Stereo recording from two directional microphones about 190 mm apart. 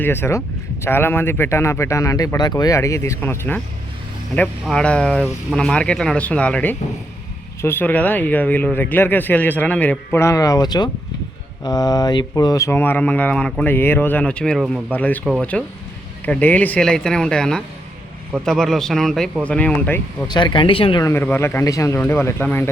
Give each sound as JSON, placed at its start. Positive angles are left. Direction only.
{"t": 0.0, "sound": "speech", "side_deg": 10}
{"t": 20.2, "sound": "speech", "side_deg": 25}
{"t": 21.0, "sound": "speech", "side_deg": 10}